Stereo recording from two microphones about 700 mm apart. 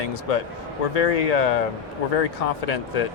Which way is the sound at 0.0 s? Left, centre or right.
Left.